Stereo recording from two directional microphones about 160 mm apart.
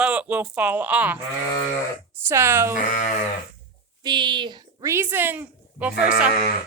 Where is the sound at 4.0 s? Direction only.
30° right (ahead or behind).